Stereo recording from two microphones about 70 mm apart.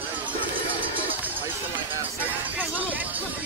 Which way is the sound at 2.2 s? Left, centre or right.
Right.